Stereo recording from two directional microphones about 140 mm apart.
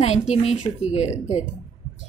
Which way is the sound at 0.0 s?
50° left (ahead or behind).